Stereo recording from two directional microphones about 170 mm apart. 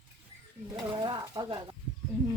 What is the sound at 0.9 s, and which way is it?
Stir, 25° right (ahead or behind).